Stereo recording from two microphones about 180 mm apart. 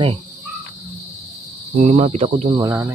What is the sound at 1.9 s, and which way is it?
Speech, 35° right (ahead or behind).